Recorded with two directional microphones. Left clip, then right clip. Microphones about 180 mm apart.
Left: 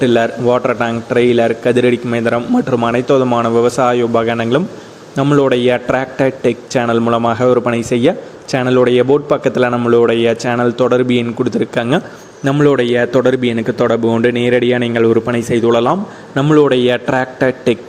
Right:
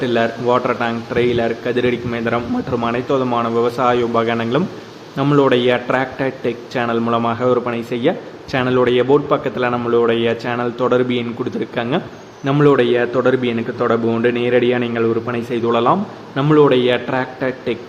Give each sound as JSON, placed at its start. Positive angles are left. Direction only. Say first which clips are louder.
{"t": 0.0, "sound": "a man's voice", "louder": "left 5 dB", "side_deg": 35}